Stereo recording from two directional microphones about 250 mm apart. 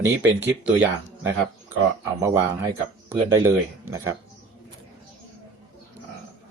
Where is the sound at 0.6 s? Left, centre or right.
Centre.